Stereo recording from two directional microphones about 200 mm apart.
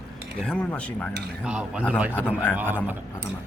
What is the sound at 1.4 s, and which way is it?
Speech, 5° right (ahead or behind).